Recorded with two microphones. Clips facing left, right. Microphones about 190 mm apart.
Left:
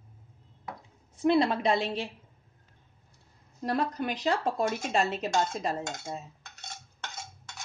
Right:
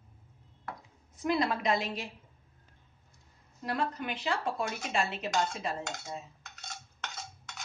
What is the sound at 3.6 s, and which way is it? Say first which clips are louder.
Speech: left 4 dB; 35° left (ahead or behind).